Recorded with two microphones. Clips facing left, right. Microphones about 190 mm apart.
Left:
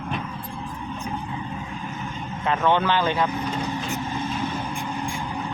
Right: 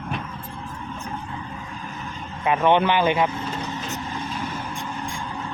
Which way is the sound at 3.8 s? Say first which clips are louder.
Left 3 dB; 15° left (ahead or behind).